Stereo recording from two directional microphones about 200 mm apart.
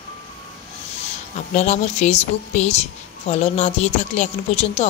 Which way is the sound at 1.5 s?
35° left (ahead or behind).